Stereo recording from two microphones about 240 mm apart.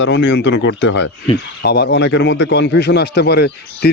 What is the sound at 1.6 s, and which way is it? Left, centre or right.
A man's voice, left.